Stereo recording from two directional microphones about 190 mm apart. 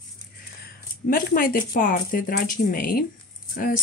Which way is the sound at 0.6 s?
50° left (ahead or behind).